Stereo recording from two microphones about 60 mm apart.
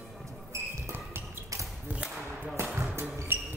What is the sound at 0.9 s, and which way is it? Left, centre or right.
Basketball bounce, right.